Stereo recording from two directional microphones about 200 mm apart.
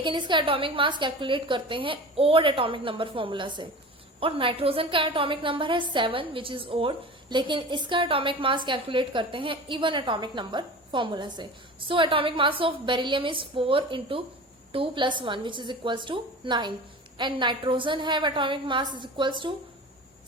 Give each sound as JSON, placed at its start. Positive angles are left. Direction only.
{"t": 0.0, "sound": "a woman's voice", "side_deg": -25}